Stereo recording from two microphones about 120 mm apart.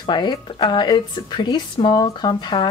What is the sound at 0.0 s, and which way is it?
Speech, 40° left (ahead or behind).